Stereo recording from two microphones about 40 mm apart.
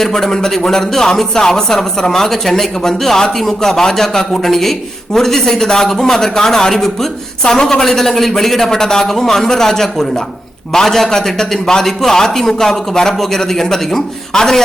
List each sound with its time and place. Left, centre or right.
0.0 s a man's voice: centre